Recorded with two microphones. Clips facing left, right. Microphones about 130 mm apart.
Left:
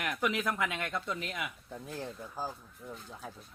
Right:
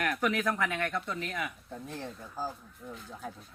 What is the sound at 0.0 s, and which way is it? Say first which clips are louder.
Speech: right 3 dB; 15° left (ahead or behind).